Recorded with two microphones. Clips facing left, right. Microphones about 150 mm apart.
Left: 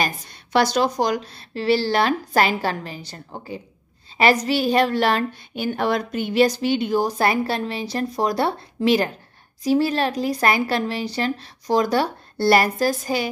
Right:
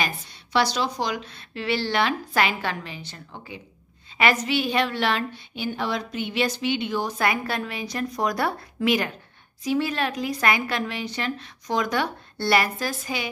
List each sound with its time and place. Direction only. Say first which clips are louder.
0.0 s a woman's voice: left 4 dB; 50° left (ahead or behind)